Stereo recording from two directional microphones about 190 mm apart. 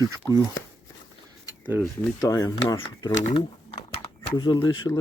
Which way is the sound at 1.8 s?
20° left (ahead or behind).